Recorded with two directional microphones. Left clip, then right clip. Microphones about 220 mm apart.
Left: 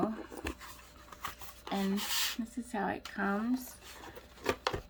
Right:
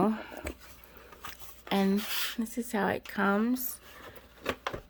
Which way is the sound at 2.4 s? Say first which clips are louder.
Right 5 dB; 55° right (ahead or behind).